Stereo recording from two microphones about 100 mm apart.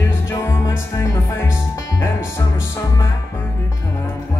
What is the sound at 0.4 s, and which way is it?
Music, 25° left (ahead or behind).